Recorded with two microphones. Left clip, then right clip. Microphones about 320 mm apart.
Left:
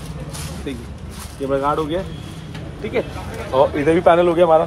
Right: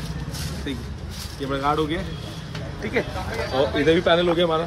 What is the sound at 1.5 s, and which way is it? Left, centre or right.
Speech, centre.